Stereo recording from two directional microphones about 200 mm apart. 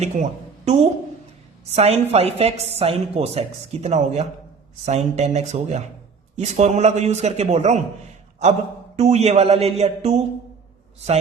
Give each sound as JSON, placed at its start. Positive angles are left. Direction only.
{"t": 0.0, "sound": "a woman's voice", "side_deg": -35}
{"t": 9.0, "sound": "a woman's voice", "side_deg": -35}